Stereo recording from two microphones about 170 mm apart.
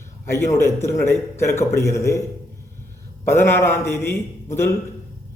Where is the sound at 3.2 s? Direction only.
15° left (ahead or behind).